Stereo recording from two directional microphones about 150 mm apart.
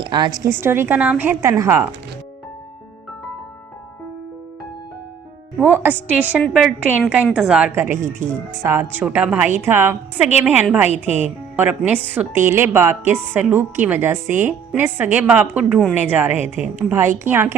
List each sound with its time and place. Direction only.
0.0 s a woman's voice: 30° right (ahead or behind)
0.6 s a woman's voice: 15° right (ahead or behind)
5.5 s a woman's voice: 10° right (ahead or behind)
10.8 s a woman's voice: 45° left (ahead or behind)
11.2 s a woman's voice: 10° right (ahead or behind)